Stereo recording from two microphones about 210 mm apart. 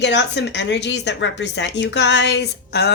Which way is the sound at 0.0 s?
55° left (ahead or behind).